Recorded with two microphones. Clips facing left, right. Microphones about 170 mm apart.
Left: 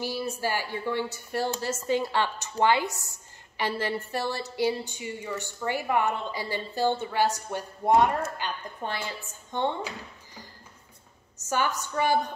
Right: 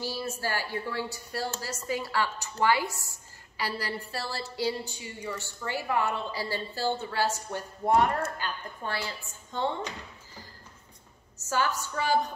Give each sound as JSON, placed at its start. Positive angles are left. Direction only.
{"t": 0.0, "sound": "a woman's voice", "side_deg": 15}
{"t": 11.4, "sound": "a woman's voice", "side_deg": 20}